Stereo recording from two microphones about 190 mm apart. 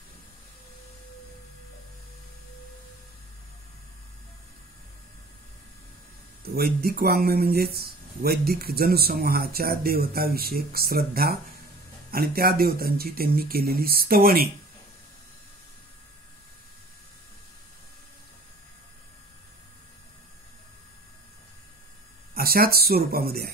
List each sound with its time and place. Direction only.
6.4 s speech: 55° right (ahead or behind)
22.3 s speech: 55° right (ahead or behind)